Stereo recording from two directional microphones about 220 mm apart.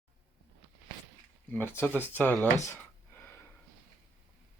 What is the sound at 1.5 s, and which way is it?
Speech, 10° left (ahead or behind).